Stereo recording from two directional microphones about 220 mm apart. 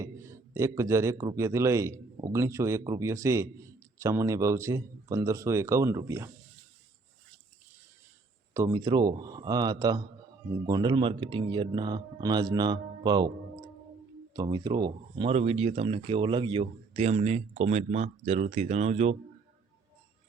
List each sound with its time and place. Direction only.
0.0 s a man's voice: 15° right (ahead or behind)
8.5 s a man's voice: 15° right (ahead or behind)
14.3 s speech: 20° right (ahead or behind)